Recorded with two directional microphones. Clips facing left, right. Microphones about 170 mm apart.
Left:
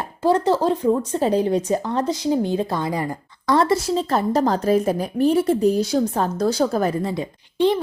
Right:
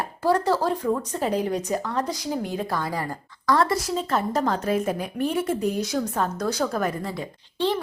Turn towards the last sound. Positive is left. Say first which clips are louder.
# left 6 dB
turn(degrees=20)  # may be behind; listen again after turning